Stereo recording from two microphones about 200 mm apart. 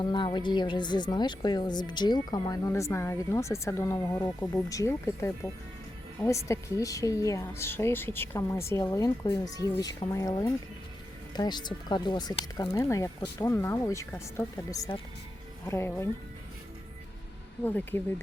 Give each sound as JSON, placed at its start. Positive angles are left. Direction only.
{"t": 0.0, "sound": "a woman's voice", "side_deg": 20}
{"t": 17.7, "sound": "a woman's voice", "side_deg": 10}